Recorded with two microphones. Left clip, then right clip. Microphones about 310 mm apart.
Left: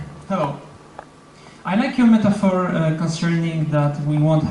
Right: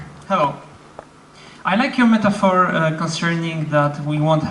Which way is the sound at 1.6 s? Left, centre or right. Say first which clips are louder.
Right 2 dB; centre.